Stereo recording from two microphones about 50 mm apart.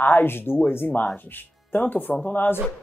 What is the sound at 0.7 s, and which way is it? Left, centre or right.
Speech, left.